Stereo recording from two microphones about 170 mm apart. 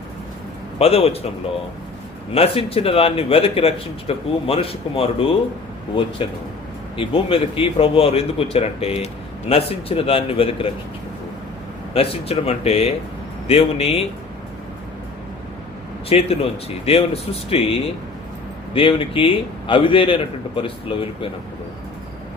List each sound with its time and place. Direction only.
0.8 s a man's voice: 35° left (ahead or behind)
2.3 s a man's voice: 35° left (ahead or behind)
6.9 s a man's voice: 30° left (ahead or behind)
11.9 s a man's voice: 35° left (ahead or behind)
16.0 s a man's voice: 35° left (ahead or behind)